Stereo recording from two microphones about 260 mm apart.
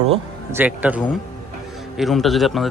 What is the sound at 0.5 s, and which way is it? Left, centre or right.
A man's voice, centre.